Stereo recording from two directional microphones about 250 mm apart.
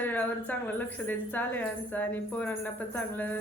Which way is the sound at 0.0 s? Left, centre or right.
Centre.